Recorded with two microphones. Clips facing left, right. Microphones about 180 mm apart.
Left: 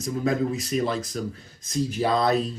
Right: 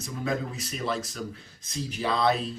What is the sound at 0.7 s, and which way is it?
Speech, 40° left (ahead or behind).